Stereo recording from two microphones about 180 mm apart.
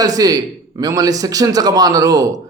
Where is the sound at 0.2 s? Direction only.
20° right (ahead or behind).